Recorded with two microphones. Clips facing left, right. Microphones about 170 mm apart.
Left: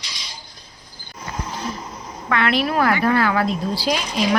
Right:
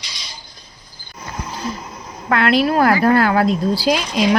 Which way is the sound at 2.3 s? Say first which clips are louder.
Right 4 dB; 35° right (ahead or behind).